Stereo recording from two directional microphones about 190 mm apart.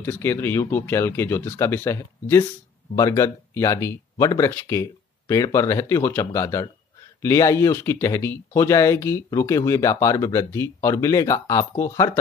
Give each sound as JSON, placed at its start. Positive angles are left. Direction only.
{"t": 0.0, "sound": "speech", "side_deg": 10}